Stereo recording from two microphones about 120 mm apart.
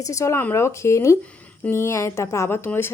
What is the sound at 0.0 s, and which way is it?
Speech, 25° left (ahead or behind).